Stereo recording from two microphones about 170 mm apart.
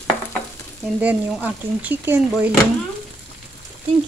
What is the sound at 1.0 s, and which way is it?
Speech, 10° right (ahead or behind).